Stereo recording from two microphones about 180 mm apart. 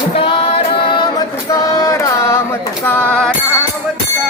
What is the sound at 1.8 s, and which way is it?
Carnatic music, 15° left (ahead or behind).